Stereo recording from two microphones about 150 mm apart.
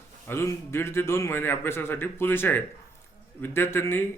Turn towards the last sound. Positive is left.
turn(degrees=15)  # may be behind; listen again after turning